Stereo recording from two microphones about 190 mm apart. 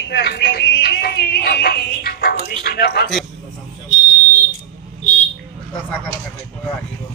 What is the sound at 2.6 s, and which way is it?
Speech, 55° left (ahead or behind).